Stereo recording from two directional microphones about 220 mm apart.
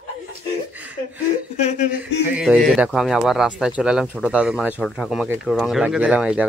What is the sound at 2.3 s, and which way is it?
Speech, 5° right (ahead or behind).